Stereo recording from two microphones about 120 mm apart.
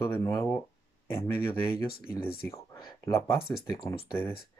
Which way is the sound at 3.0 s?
25° left (ahead or behind).